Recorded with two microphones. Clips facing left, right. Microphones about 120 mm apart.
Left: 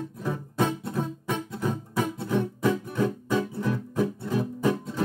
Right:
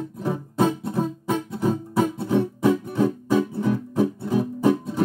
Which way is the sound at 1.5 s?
25° right (ahead or behind).